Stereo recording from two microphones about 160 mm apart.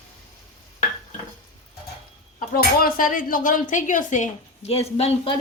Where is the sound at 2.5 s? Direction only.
65° left (ahead or behind); by 5.3 s 40° left (ahead or behind).